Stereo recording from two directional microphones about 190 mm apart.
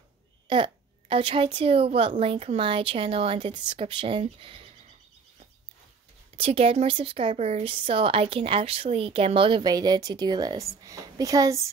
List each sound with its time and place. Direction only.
0.5 s a woman's voice: 25° right (ahead or behind)
6.3 s a woman's voice: 30° right (ahead or behind)